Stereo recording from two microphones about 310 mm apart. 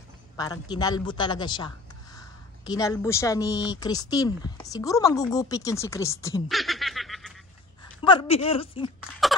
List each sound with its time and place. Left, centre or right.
0.4 s a woman's voice: centre
8.0 s speech: centre